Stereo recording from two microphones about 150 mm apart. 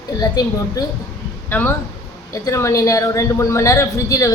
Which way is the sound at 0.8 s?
25° left (ahead or behind).